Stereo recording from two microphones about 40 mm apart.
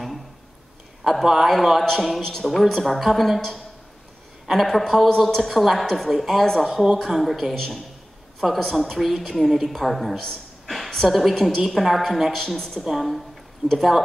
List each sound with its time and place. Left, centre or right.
1.0 s a woman's voice: centre
3.3 s a woman's voice: centre
8.4 s speech: centre
8.7 s a woman's voice: centre
10.7 s a sound: centre
11.1 s a woman's voice: centre
12.3 s speech: centre
12.8 s a woman's voice: centre